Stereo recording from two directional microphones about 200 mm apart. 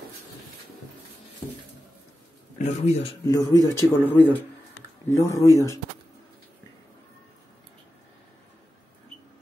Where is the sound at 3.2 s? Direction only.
15° left (ahead or behind).